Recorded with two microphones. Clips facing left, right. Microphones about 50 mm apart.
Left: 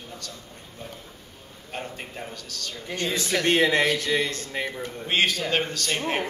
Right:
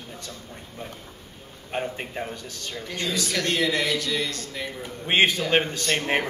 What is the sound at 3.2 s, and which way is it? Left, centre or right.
Speech, left.